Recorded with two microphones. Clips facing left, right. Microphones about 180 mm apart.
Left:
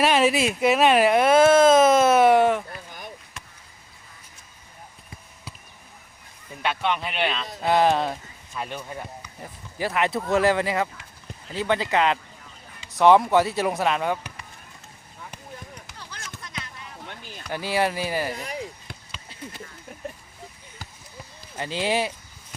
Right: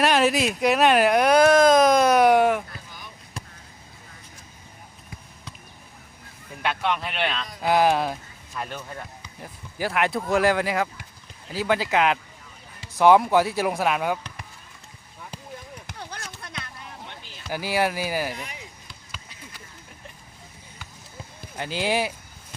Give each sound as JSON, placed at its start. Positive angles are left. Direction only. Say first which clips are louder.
{"t": 0.0, "sound": "speech", "louder": "even", "side_deg": 0}
{"t": 6.6, "sound": "speech", "louder": "even", "side_deg": 0}
{"t": 9.4, "sound": "speech", "louder": "even", "side_deg": 0}
{"t": 15.9, "sound": "basketball bounce", "louder": "right 3 dB", "side_deg": -55}
{"t": 17.5, "sound": "speech", "louder": "even", "side_deg": -5}
{"t": 18.3, "sound": "speech", "louder": "left 5 dB", "side_deg": 35}
{"t": 21.5, "sound": "speech", "louder": "even", "side_deg": 0}